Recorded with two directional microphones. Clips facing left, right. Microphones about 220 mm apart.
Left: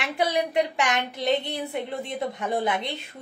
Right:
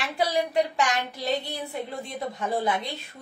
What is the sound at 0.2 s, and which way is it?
Speech, 20° left (ahead or behind).